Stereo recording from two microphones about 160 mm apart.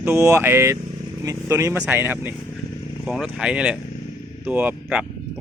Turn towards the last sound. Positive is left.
turn(degrees=-10)  # may be behind; listen again after turning